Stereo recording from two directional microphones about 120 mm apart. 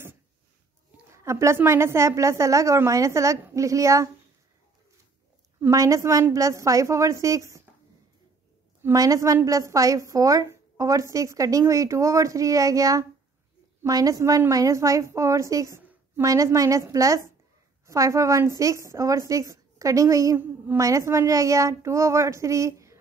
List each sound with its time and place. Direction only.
1.1 s a woman's voice: 25° right (ahead or behind)
5.6 s a woman's voice: 25° right (ahead or behind)
8.8 s a woman's voice: 30° right (ahead or behind)
20.3 s a child's voice: 15° right (ahead or behind)